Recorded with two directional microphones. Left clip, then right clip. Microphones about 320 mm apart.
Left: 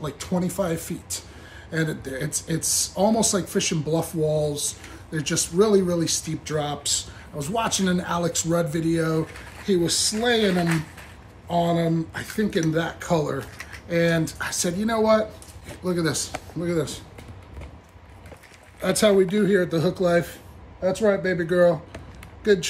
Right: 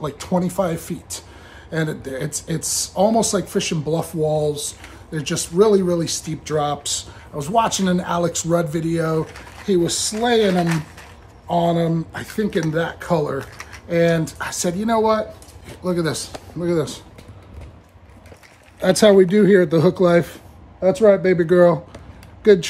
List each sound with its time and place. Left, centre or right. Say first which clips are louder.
0.0 s speech: right 6 dB; centre
18.8 s speech: right 6 dB; centre